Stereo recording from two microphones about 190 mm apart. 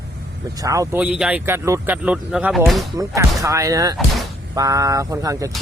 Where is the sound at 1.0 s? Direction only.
5° right (ahead or behind).